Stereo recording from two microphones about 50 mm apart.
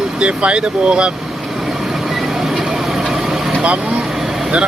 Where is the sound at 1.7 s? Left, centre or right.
Centre.